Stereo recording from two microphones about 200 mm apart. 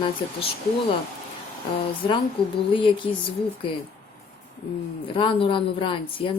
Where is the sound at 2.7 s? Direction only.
25° left (ahead or behind).